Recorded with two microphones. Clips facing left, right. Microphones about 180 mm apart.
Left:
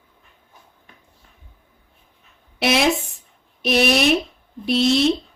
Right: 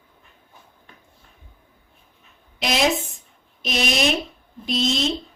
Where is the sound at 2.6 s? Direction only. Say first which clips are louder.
Left 3 dB; 60° left (ahead or behind).